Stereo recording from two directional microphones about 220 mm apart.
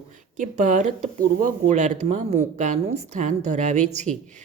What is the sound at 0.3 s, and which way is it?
Speech, 35° right (ahead or behind).